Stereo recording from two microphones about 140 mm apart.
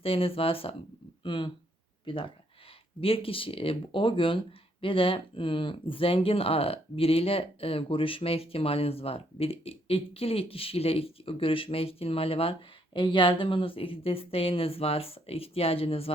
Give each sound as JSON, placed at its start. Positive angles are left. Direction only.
{"t": 0.0, "sound": "speech", "side_deg": 40}